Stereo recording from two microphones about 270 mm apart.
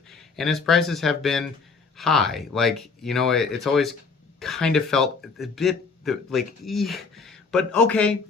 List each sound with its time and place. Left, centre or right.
0.1 s speech: centre